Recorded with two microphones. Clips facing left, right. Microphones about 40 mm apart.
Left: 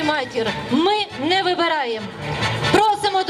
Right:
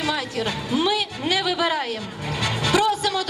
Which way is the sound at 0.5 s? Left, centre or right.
Left.